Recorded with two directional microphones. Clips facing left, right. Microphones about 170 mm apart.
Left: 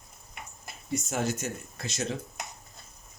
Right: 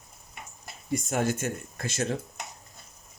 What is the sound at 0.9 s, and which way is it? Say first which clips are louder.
Speech: right 3 dB; 55° right (ahead or behind).